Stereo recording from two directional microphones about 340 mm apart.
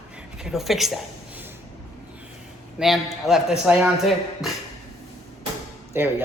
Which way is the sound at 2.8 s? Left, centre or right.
Centre.